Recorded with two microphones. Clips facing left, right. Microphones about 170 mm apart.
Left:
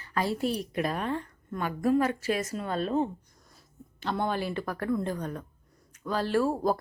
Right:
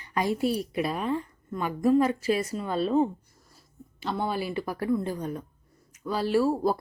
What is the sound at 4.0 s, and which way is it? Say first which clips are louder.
Speech: even; 5° right (ahead or behind).